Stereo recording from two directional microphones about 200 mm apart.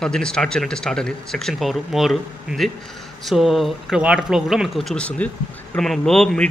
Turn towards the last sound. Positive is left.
turn(degrees=0)  # may be behind; listen again after turning